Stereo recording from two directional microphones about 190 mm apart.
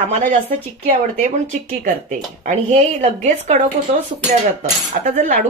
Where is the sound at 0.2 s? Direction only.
35° right (ahead or behind).